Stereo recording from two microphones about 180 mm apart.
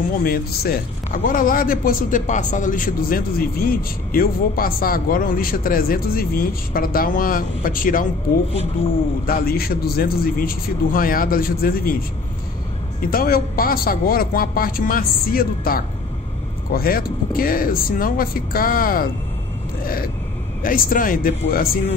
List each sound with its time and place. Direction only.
0.2 s speech: 55° left (ahead or behind)
9.2 s speech: 55° left (ahead or behind)
13.0 s speech: 55° left (ahead or behind)
19.8 s a sound: 55° left (ahead or behind)
20.6 s speech: 50° left (ahead or behind)